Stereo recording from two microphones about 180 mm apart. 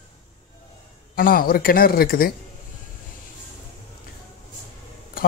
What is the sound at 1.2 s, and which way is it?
Speech, 50° left (ahead or behind).